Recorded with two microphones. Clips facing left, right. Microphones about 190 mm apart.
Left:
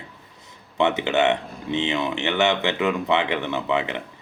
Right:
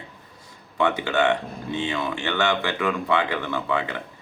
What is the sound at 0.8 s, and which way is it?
Speech, 20° left (ahead or behind).